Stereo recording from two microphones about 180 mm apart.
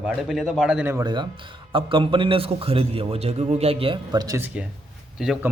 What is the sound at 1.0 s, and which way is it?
A man's voice, 25° right (ahead or behind).